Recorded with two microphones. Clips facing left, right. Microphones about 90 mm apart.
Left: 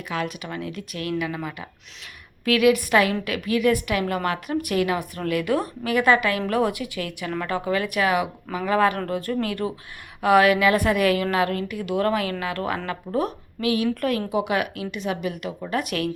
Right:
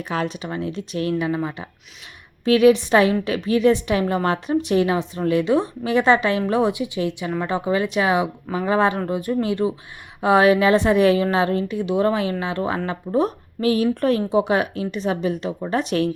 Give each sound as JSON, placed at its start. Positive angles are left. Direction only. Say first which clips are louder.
{"t": 0.1, "sound": "a woman's voice", "louder": "right 3 dB", "side_deg": -35}